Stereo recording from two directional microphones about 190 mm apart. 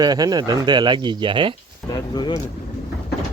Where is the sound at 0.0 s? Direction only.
20° right (ahead or behind).